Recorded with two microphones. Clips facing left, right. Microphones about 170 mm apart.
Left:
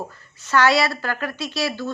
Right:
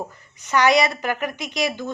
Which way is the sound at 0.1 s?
15° right (ahead or behind).